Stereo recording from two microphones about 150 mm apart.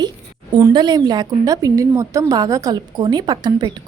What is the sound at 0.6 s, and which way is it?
A woman's voice, 30° right (ahead or behind).